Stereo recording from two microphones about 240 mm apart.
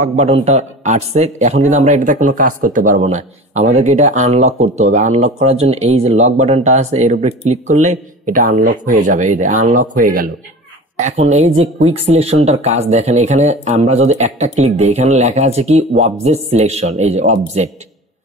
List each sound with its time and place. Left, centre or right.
0.0 s speech: right